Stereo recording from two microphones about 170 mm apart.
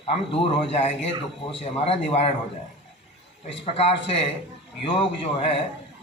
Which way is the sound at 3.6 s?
35° left (ahead or behind).